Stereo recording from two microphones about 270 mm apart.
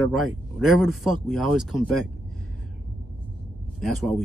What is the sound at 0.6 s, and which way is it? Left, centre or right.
Speech, centre.